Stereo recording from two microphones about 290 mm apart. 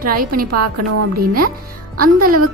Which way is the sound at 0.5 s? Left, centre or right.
Right.